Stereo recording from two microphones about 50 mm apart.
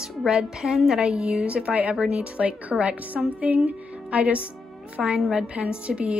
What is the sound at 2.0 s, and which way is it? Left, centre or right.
A woman's voice, centre.